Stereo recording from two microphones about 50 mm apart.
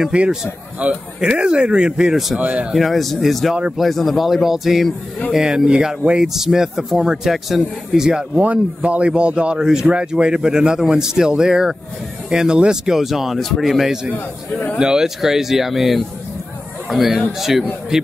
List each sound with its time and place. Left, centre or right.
0.1 s speech: right
2.7 s a man's voice: centre
8.4 s a man's voice: right; by 13.7 s centre
13.7 s speech: centre
14.1 s a man's voice: left
14.8 s a man's voice: centre